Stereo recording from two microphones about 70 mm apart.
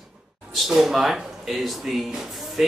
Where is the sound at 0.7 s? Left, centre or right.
Centre.